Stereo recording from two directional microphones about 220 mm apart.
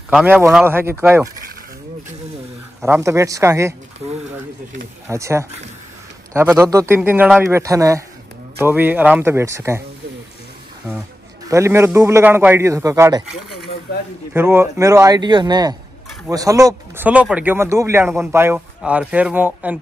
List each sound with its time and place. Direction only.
0.1 s speech: 5° right (ahead or behind)
2.8 s speech: 15° right (ahead or behind)
5.0 s speech: 15° right (ahead or behind)
11.4 s speech: 15° right (ahead or behind)
14.3 s speech: 10° right (ahead or behind)